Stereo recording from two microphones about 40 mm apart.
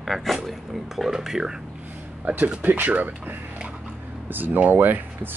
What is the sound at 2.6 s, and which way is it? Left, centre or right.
Speech, right.